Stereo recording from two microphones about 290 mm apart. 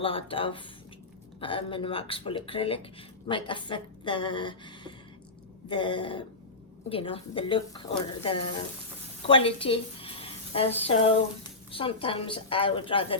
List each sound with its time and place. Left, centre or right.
0.0 s a woman's voice: centre